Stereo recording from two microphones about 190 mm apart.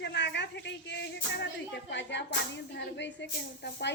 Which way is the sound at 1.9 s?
70° left (ahead or behind).